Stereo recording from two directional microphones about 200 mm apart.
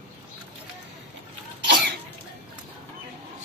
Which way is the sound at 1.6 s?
55° right (ahead or behind).